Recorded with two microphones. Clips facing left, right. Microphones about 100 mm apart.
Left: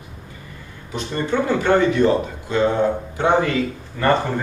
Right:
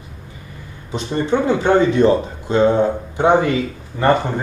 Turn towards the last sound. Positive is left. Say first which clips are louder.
# right 3 dB
turn(degrees=-20)  # may be behind; listen again after turning